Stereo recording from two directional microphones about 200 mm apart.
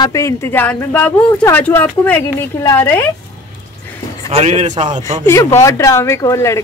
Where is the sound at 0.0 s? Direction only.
15° left (ahead or behind).